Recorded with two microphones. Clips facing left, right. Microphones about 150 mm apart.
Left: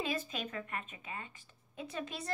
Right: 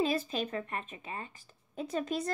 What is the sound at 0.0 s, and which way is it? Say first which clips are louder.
Speech: right 7 dB; 35° right (ahead or behind).